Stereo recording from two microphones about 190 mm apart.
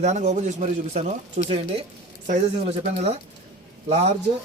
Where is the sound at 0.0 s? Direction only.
40° right (ahead or behind).